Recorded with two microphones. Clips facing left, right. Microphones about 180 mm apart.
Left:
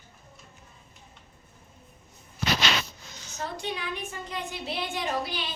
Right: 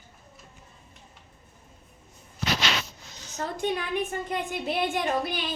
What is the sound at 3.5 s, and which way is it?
A woman's voice, 55° right (ahead or behind).